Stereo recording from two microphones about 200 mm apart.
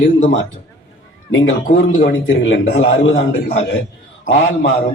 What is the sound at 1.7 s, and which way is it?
A man's voice, 45° left (ahead or behind).